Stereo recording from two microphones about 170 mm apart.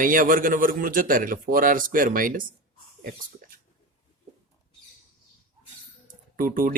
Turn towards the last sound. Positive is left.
turn(degrees=-55)  # may be behind; listen again after turning